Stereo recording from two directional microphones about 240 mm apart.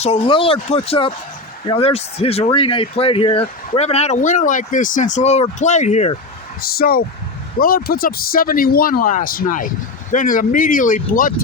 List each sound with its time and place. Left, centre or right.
0.0 s speech: left
6.6 s speech: left